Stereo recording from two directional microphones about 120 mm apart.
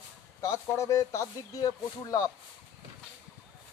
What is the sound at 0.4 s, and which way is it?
Speech, 25° left (ahead or behind).